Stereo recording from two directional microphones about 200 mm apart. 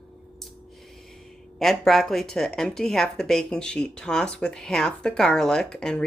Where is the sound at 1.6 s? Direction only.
Centre (ahead or behind).